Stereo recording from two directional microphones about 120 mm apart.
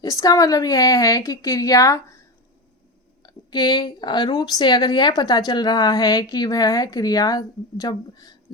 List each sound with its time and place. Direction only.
0.0 s a woman's voice: 30° left (ahead or behind)
3.2 s speech: 35° left (ahead or behind)